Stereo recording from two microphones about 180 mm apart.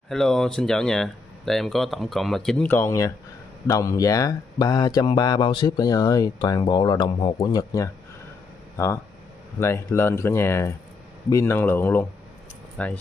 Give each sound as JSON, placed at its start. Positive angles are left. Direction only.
{"t": 0.1, "sound": "speech", "side_deg": 5}